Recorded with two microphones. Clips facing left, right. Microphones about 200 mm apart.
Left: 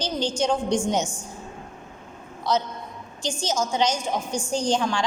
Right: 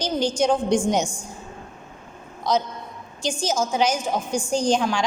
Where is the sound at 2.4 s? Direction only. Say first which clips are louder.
Right 2 dB; 15° right (ahead or behind).